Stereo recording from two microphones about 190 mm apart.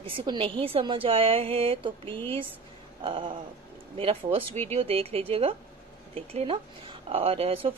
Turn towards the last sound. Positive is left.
turn(degrees=-30)  # may be behind; listen again after turning